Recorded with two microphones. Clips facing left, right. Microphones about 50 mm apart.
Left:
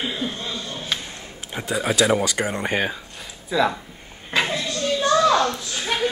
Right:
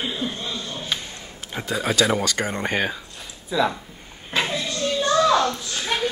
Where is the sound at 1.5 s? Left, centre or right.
Centre.